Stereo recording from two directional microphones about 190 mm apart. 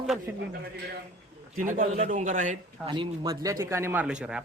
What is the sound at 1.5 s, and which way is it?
A man's voice, 45° right (ahead or behind).